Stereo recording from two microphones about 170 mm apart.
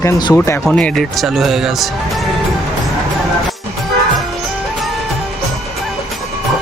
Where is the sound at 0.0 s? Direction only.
20° left (ahead or behind); by 1.9 s centre (ahead or behind).